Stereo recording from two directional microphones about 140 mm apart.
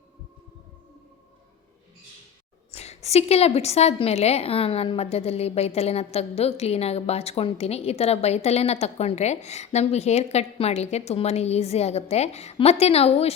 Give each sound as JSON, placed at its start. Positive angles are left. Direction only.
{"t": 2.7, "sound": "a woman's voice", "side_deg": 50}